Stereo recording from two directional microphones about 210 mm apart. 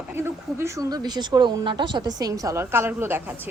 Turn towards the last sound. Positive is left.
turn(degrees=-10)  # may be behind; listen again after turning